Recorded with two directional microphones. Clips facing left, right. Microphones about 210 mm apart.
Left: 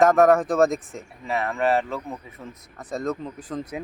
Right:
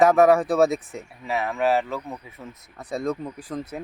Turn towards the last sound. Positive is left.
turn(degrees=-10)  # may be behind; listen again after turning